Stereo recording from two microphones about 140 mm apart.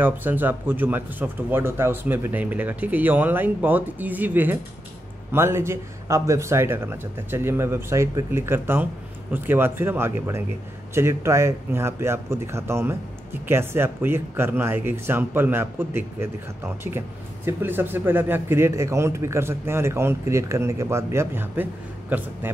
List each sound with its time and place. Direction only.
0.0 s a man's voice: 15° right (ahead or behind)